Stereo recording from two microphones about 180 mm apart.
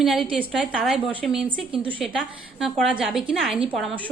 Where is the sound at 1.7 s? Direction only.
30° right (ahead or behind).